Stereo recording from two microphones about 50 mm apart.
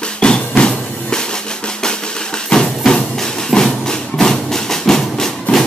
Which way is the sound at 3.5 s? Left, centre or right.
Centre.